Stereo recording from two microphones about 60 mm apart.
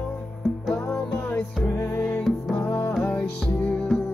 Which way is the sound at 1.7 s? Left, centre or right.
Left.